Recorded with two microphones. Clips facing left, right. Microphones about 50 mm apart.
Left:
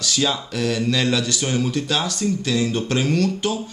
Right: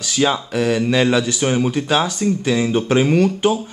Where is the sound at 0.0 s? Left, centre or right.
Centre.